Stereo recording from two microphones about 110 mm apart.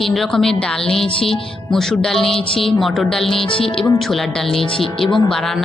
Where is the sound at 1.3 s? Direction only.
5° left (ahead or behind).